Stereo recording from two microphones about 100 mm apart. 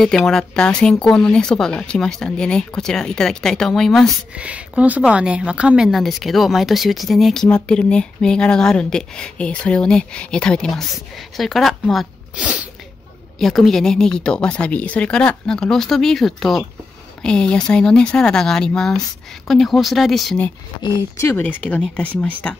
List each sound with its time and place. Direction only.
0.0 s speech: 5° left (ahead or behind)
4.4 s speech: 15° right (ahead or behind)
5.9 s a woman's voice: centre (ahead or behind)
12.4 s sneeze: 10° right (ahead or behind)
13.4 s a woman's voice: centre (ahead or behind)
21.4 s speech: 15° left (ahead or behind)